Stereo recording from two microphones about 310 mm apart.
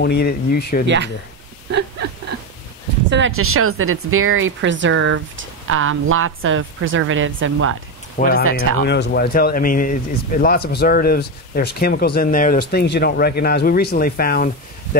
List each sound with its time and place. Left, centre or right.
0.0 s speech: left
0.8 s speech: right
1.7 s whimper: right
3.1 s speech: right
8.2 s speech: left